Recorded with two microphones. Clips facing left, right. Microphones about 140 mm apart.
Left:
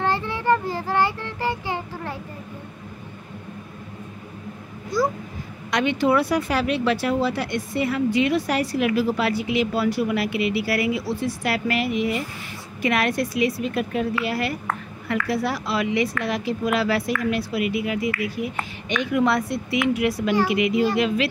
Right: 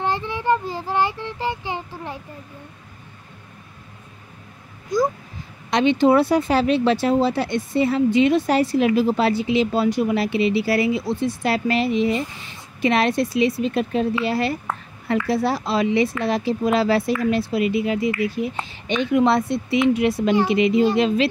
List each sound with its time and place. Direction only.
0.0 s a child's voice: 15° right (ahead or behind)
5.7 s speech: 25° right (ahead or behind)